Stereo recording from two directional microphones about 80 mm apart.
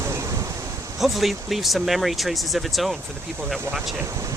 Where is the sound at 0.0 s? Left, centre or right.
Right.